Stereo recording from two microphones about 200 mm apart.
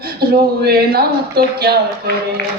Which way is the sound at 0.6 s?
50° right (ahead or behind).